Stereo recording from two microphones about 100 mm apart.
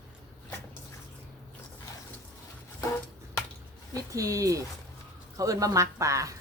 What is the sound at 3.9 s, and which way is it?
Speech, 35° right (ahead or behind).